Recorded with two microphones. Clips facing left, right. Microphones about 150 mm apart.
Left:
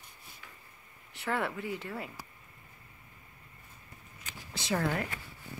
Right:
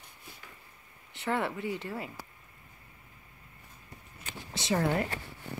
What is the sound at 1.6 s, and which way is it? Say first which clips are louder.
Speech: right 2 dB; centre (ahead or behind).